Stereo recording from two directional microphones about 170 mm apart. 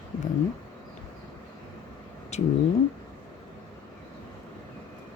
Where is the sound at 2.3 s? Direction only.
40° left (ahead or behind).